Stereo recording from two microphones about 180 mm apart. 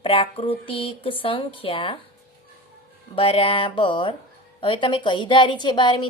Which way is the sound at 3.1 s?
30° left (ahead or behind).